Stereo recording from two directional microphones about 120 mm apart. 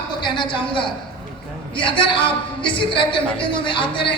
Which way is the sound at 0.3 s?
45° left (ahead or behind).